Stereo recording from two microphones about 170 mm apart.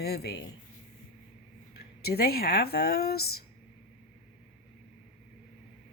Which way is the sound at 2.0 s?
65° left (ahead or behind).